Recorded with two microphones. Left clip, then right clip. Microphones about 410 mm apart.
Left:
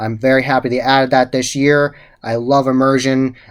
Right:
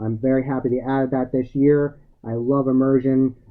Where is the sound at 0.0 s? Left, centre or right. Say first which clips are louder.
Left 8 dB; centre.